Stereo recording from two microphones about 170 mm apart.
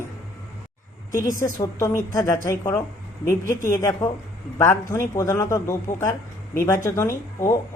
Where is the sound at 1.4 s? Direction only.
15° left (ahead or behind).